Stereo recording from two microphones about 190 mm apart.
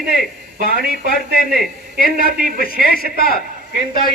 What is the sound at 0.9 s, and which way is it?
Speech, 55° left (ahead or behind).